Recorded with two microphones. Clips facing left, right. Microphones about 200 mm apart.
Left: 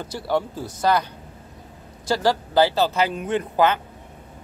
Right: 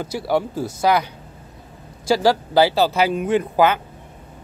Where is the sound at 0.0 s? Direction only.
10° right (ahead or behind).